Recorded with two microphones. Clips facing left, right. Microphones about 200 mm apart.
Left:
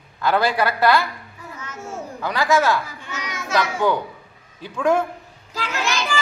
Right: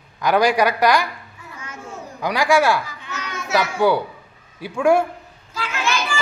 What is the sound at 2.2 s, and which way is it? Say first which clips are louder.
A man's voice: right 2 dB; 15° right (ahead or behind).